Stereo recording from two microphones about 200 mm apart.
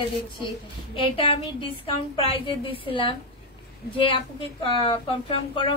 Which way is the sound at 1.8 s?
25° left (ahead or behind).